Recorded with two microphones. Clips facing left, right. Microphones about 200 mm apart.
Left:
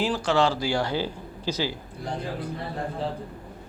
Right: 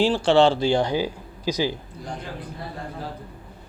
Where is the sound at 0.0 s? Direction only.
30° right (ahead or behind); by 1.7 s 15° right (ahead or behind).